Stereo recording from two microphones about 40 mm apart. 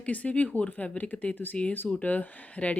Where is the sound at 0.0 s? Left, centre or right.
Left.